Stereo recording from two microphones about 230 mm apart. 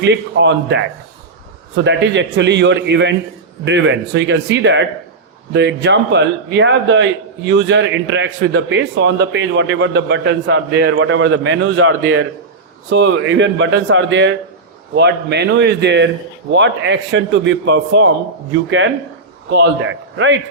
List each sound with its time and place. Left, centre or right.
0.0 s a man's voice: right